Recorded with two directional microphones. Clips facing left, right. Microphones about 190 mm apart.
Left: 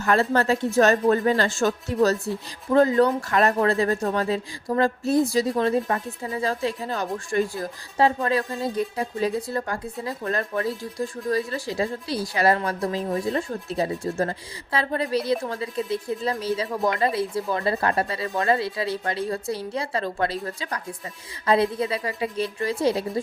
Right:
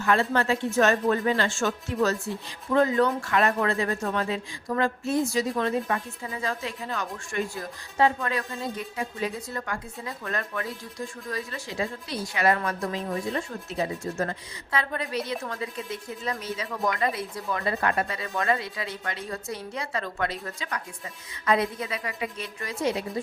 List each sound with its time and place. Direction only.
0.0 s speech: 40° left (ahead or behind)
16.6 s speech: 20° left (ahead or behind)
16.9 s speech: 30° left (ahead or behind)